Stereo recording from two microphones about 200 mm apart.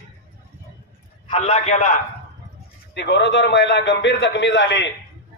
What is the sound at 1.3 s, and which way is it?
Speech, 30° left (ahead or behind).